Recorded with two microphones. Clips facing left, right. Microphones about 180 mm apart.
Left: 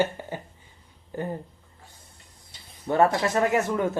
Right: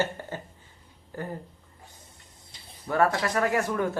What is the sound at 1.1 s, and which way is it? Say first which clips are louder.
Speech: left 4 dB; 20° left (ahead or behind).